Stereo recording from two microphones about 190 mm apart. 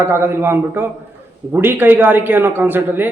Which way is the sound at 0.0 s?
10° right (ahead or behind).